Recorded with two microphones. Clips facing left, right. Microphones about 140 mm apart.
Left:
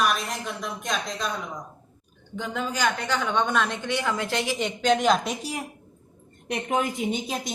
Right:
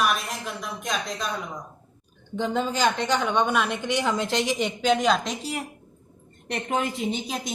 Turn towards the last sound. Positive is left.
turn(degrees=0)  # may be behind; listen again after turning